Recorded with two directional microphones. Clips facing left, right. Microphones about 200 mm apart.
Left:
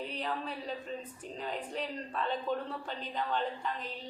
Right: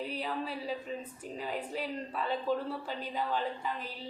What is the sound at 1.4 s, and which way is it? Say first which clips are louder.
Speech: right 1 dB; 5° right (ahead or behind).